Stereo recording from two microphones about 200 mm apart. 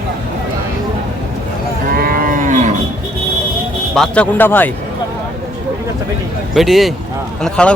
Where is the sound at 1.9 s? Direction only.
45° right (ahead or behind).